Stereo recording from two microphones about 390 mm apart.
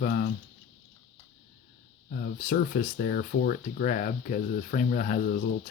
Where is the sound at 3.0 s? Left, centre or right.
Left.